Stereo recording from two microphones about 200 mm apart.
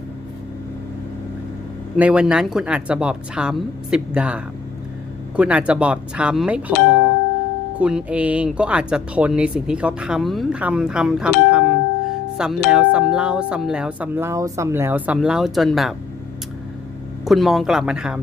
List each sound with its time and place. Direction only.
2.0 s speech: 5° right (ahead or behind)
5.4 s speech: 5° right (ahead or behind)
17.2 s speech: centre (ahead or behind)